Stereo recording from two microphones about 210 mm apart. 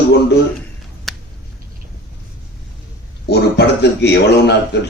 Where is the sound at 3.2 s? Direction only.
50° left (ahead or behind).